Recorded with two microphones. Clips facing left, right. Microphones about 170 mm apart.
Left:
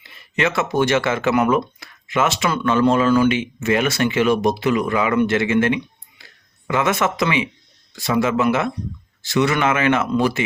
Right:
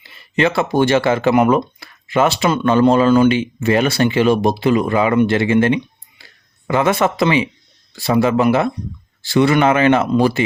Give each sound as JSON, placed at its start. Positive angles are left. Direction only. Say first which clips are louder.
{"t": 0.0, "sound": "speech", "louder": "right 5 dB", "side_deg": -30}